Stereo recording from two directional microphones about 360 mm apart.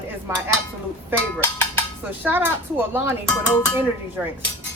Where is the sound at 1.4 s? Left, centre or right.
Centre.